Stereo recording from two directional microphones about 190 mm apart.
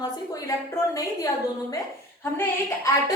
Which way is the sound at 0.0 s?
20° left (ahead or behind).